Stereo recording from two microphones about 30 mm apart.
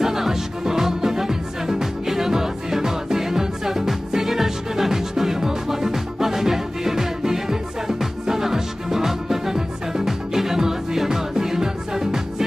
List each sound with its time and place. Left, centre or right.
0.0 s music: centre